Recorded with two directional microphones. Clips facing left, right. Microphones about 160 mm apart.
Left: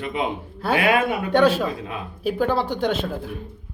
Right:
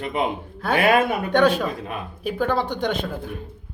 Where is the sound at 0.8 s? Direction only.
40° right (ahead or behind).